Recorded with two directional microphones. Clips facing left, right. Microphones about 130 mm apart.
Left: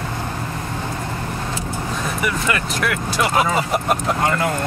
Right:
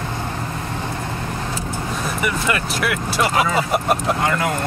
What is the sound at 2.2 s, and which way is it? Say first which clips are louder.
Speech: right 1 dB; 5° right (ahead or behind).